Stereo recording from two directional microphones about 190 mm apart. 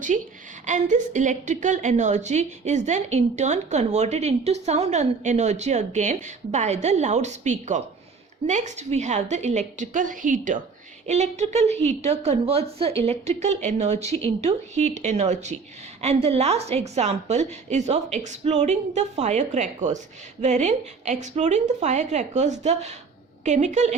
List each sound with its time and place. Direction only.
0.1 s a woman's voice: 35° right (ahead or behind)